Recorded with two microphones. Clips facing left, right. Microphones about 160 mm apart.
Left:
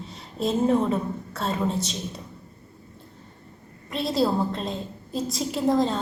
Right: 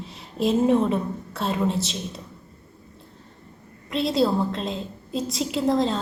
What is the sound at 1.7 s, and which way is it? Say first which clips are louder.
Speech: right 1 dB; 30° right (ahead or behind).